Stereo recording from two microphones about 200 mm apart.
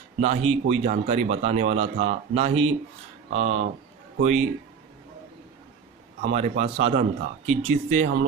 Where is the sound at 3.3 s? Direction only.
90° right.